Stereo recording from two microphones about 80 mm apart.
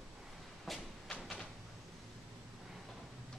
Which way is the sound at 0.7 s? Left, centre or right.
Centre.